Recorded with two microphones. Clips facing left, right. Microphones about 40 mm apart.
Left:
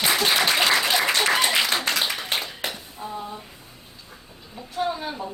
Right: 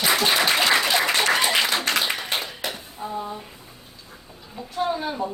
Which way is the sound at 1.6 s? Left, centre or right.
Right.